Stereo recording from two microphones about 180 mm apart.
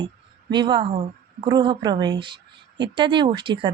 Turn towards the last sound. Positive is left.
turn(degrees=-25)  # may be behind; listen again after turning